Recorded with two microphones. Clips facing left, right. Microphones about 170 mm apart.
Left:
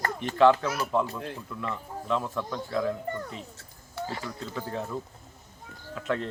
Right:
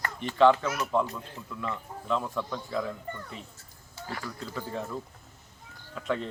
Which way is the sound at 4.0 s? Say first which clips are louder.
Left 8 dB; 60° left (ahead or behind).